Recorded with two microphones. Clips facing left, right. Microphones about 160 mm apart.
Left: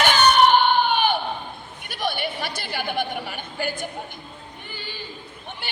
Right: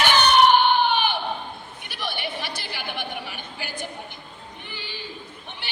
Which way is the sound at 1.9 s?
45° left (ahead or behind).